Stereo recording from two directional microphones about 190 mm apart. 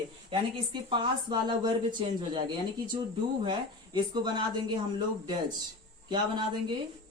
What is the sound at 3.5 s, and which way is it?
Speech, 25° right (ahead or behind).